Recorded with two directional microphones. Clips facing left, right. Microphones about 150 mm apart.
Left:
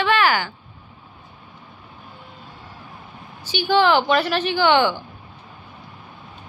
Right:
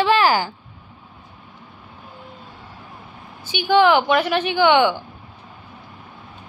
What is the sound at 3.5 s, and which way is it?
A woman's voice, 15° right (ahead or behind).